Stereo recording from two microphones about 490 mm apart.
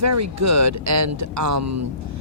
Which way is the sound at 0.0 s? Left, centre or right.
Right.